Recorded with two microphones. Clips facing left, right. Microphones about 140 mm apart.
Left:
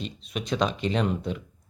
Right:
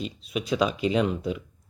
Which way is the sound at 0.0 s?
5° right (ahead or behind).